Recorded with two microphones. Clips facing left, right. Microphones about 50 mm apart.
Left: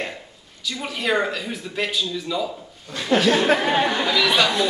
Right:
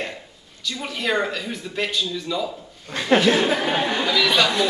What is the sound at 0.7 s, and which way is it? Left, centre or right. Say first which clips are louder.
Speech: left 1 dB; centre.